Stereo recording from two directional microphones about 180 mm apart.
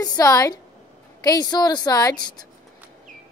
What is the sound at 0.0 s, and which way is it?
A woman's voice, 20° left (ahead or behind).